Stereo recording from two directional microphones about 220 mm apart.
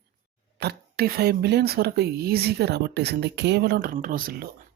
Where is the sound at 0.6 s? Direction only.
45° right (ahead or behind).